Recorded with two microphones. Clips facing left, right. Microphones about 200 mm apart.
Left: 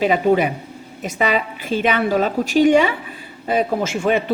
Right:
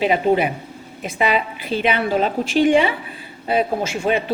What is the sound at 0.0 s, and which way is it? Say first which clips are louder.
A woman's voice: left 1 dB; 45° left (ahead or behind).